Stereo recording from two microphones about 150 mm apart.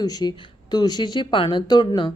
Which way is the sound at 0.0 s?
25° left (ahead or behind).